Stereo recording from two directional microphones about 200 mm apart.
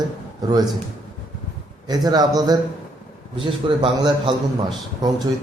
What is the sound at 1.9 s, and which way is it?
A man's voice, 20° right (ahead or behind).